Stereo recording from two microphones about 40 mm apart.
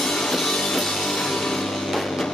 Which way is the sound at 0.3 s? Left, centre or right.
Centre.